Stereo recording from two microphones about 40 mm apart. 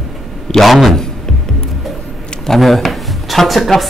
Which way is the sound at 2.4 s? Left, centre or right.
Centre.